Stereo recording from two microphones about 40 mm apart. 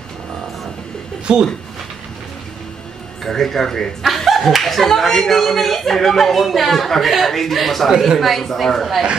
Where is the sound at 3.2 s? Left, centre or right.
Centre.